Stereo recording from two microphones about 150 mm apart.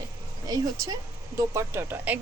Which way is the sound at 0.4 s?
25° right (ahead or behind).